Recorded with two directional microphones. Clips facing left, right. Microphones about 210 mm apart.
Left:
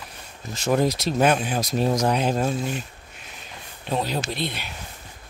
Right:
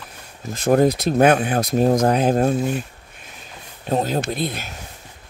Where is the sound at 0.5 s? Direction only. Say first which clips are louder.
Right 5 dB; 55° right (ahead or behind).